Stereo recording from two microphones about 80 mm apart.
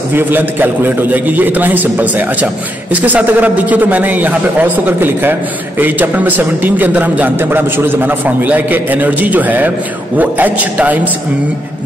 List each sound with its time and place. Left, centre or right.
0.1 s a man's voice: right